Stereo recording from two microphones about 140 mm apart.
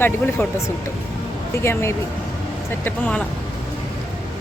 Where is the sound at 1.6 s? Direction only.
20° left (ahead or behind).